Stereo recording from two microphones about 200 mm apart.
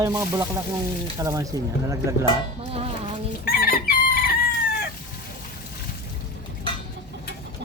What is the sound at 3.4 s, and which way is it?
Chicken, 45° left (ahead or behind).